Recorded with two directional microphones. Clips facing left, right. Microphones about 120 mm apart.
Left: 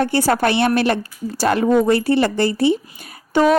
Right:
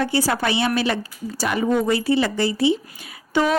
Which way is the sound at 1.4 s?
80° left.